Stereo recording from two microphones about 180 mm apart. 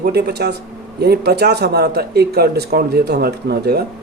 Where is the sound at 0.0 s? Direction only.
65° right (ahead or behind).